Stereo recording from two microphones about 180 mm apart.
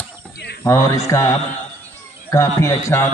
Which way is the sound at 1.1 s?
15° left (ahead or behind).